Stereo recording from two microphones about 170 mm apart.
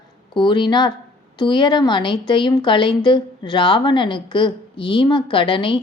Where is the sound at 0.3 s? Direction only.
25° left (ahead or behind).